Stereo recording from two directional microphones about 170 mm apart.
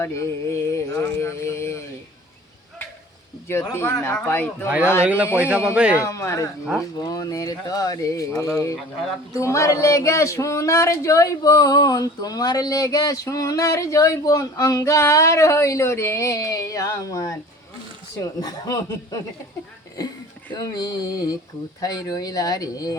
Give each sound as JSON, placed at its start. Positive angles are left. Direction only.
{"t": 0.0, "sound": "speech", "side_deg": 15}
{"t": 3.5, "sound": "speech", "side_deg": 15}
{"t": 5.0, "sound": "a man's voice", "side_deg": -10}
{"t": 6.0, "sound": "speech", "side_deg": 15}
{"t": 20.5, "sound": "speech", "side_deg": 25}